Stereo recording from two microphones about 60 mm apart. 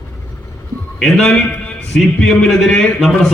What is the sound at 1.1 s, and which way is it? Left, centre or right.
Speech, centre.